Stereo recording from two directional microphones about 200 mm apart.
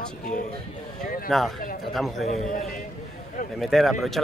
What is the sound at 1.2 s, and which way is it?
Speech, centre (ahead or behind).